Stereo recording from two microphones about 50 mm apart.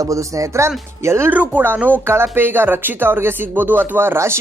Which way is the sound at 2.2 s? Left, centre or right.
Right.